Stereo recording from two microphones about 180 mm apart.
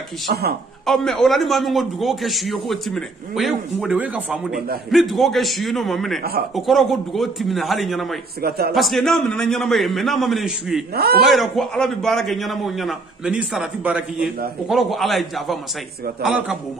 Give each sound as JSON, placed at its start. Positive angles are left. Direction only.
{"t": 0.3, "sound": "a man's voice", "side_deg": -60}
{"t": 0.8, "sound": "a man's voice", "side_deg": 0}
{"t": 8.4, "sound": "a man's voice", "side_deg": -60}
{"t": 8.7, "sound": "a man's voice", "side_deg": 0}